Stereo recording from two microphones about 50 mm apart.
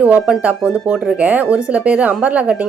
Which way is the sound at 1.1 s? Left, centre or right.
Right.